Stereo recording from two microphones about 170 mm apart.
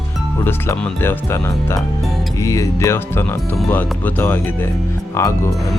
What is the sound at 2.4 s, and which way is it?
Speech, 20° left (ahead or behind).